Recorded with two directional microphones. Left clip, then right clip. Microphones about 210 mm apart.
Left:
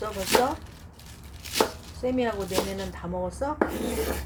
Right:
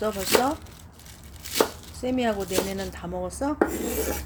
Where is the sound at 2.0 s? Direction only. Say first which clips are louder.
Right 1 dB; 55° right (ahead or behind).